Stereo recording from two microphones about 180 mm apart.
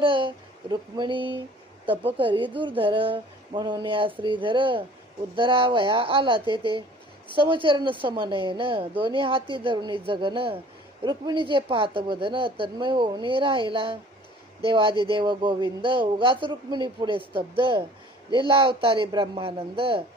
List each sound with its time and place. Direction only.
0.0 s speech: 30° right (ahead or behind)